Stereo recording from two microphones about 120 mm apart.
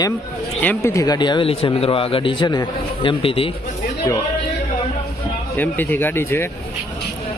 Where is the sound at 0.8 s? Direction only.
25° left (ahead or behind); by 3.5 s 50° left (ahead or behind).